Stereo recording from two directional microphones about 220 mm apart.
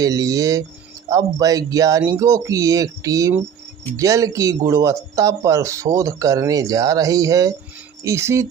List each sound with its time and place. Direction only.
0.0 s speech: 15° right (ahead or behind)